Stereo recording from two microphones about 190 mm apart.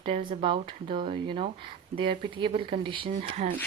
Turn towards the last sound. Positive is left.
turn(degrees=-40)  # may be behind; listen again after turning